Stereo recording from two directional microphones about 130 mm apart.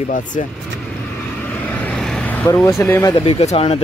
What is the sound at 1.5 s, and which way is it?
Vehicle, 15° left (ahead or behind).